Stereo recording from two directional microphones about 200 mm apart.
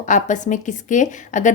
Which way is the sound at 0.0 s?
40° left (ahead or behind).